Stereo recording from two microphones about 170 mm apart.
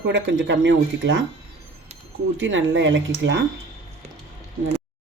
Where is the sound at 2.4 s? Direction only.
90° right.